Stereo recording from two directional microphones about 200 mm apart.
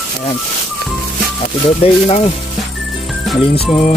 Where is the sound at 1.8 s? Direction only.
30° left (ahead or behind).